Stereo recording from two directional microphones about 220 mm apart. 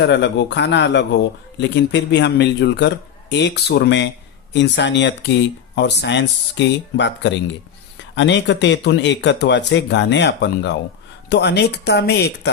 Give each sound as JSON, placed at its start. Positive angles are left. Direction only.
{"t": 0.0, "sound": "speech", "side_deg": 50}